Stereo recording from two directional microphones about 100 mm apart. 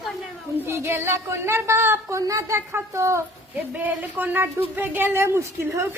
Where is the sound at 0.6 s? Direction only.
25° right (ahead or behind).